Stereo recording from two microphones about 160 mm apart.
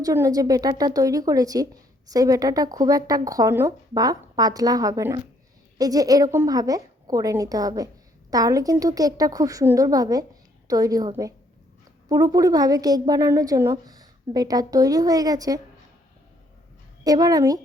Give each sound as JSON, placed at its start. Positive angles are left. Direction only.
{"t": 0.0, "sound": "a woman's voice", "side_deg": -20}
{"t": 17.0, "sound": "a woman's voice", "side_deg": -25}